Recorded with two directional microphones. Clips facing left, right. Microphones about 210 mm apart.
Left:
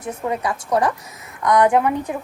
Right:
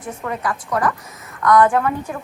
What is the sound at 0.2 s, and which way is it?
A woman's voice, 20° left (ahead or behind).